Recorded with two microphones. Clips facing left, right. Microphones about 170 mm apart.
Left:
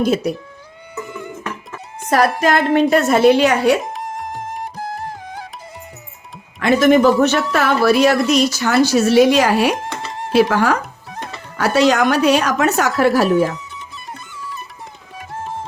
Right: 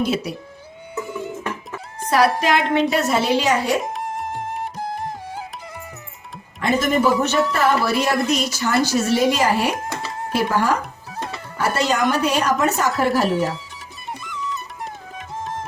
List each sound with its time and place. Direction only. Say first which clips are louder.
0.0 s a woman's voice: left 5 dB; 50° left (ahead or behind)
2.0 s a woman's voice: left 2 dB; 50° left (ahead or behind)
3.8 s music: even; centre (ahead or behind)
6.6 s a woman's voice: left 7 dB; 75° left (ahead or behind)